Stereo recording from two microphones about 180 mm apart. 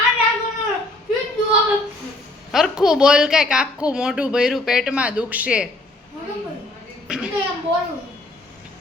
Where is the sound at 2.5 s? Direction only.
Centre (ahead or behind).